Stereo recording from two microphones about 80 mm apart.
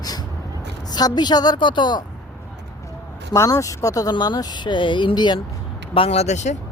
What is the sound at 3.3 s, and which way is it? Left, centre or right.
Speech, left.